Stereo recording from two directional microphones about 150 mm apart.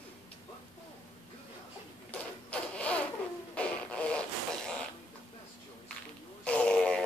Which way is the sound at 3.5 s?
5° left (ahead or behind).